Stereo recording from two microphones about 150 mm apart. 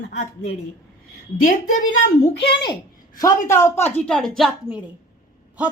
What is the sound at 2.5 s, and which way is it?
Speech, 30° left (ahead or behind).